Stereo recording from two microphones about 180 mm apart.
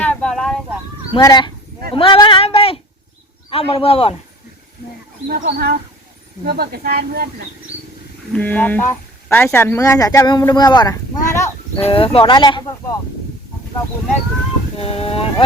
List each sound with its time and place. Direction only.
0.0 s vehicle: 5° left (ahead or behind)
1.1 s speech: 25° left (ahead or behind)
5.3 s speech: 60° right (ahead or behind)
8.3 s speech: 10° left (ahead or behind)
11.9 s speech: 30° left (ahead or behind)
14.8 s speech: 30° left (ahead or behind)